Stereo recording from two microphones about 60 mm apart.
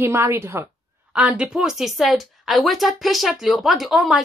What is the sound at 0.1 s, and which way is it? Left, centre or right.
Speech, right.